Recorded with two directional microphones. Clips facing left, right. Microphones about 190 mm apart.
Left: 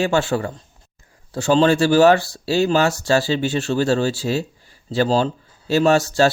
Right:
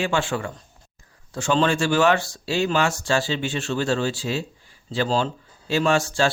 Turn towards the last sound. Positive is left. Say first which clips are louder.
# left 5 dB
turn(degrees=40)  # may be behind; listen again after turning